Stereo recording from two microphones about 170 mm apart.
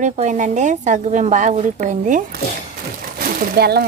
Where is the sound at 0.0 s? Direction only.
45° right (ahead or behind).